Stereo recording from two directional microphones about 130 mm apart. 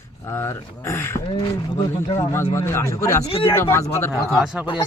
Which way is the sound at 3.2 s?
45° left (ahead or behind).